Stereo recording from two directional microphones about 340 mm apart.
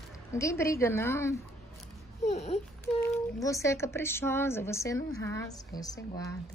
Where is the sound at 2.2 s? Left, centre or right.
Centre.